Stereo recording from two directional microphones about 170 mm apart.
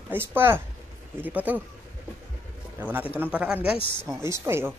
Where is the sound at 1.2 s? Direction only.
10° right (ahead or behind).